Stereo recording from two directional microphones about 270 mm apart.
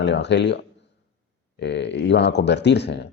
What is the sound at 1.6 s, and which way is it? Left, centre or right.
Speech, left.